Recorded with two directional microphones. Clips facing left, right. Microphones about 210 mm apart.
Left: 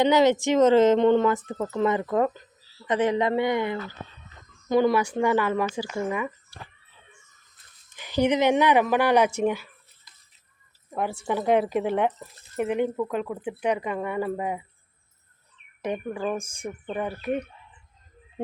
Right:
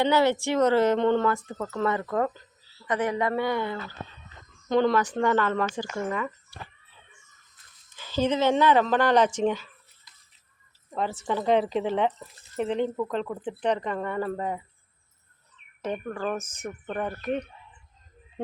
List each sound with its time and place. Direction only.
0.0 s speech: 15° left (ahead or behind)
7.9 s speech: 15° left (ahead or behind)
10.9 s speech: 10° left (ahead or behind)
15.8 s speech: 15° left (ahead or behind)